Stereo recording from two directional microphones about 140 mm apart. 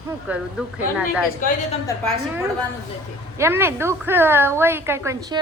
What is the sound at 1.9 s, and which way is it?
Speech, 25° left (ahead or behind).